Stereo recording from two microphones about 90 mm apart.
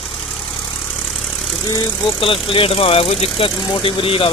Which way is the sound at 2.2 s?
75° left (ahead or behind).